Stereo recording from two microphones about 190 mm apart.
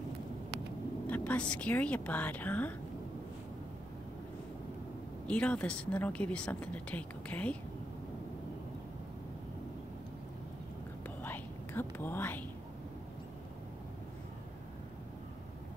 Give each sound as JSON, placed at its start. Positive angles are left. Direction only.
{"t": 1.0, "sound": "speech", "side_deg": 10}
{"t": 5.3, "sound": "speech", "side_deg": 5}
{"t": 11.2, "sound": "whispering", "side_deg": 10}